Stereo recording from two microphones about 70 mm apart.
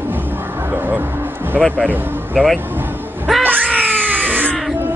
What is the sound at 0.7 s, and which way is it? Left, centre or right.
Speech, right.